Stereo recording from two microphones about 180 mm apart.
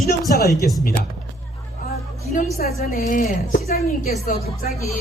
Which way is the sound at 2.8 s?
55° left (ahead or behind).